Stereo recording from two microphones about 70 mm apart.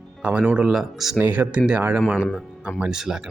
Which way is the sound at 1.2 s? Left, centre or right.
Right.